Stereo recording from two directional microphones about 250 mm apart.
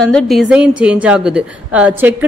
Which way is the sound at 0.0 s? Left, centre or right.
Centre.